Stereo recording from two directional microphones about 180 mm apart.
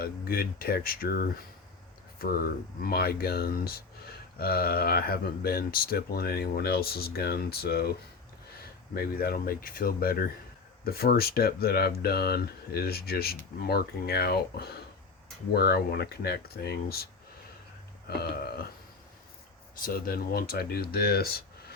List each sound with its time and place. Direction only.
0.0 s speech: 55° left (ahead or behind)
9.0 s speech: 55° left (ahead or behind)
18.2 s speech: 60° left (ahead or behind)
19.8 s speech: 55° left (ahead or behind)